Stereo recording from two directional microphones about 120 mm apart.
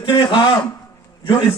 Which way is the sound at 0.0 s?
40° left (ahead or behind).